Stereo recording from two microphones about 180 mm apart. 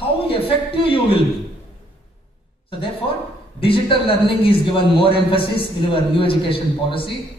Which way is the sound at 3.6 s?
30° left (ahead or behind).